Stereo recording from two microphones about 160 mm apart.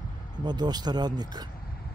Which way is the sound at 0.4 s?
25° right (ahead or behind).